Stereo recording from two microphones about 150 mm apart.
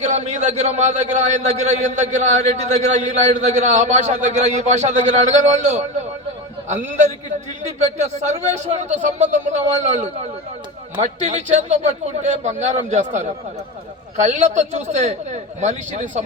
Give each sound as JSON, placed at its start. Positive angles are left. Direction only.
{"t": 0.0, "sound": "a man's voice", "side_deg": -50}
{"t": 8.3, "sound": "a man's voice", "side_deg": -50}